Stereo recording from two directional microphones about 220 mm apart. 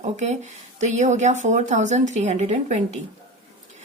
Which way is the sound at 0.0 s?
30° right (ahead or behind).